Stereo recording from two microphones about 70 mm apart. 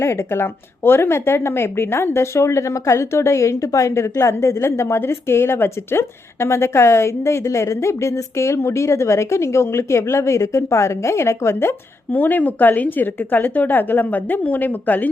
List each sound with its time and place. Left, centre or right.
0.0 s a woman's voice: left
12.1 s a woman's voice: left